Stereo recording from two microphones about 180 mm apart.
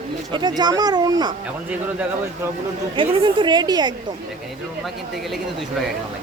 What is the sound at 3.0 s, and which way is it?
Speech, 30° right (ahead or behind).